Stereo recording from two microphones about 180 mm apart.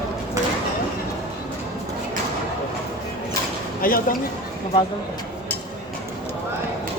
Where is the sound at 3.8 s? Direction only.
50° left (ahead or behind).